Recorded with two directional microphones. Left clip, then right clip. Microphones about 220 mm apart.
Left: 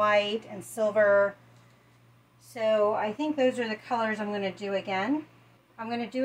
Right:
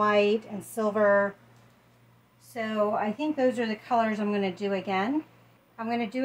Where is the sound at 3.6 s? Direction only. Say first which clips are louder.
Right 3 dB; 45° right (ahead or behind).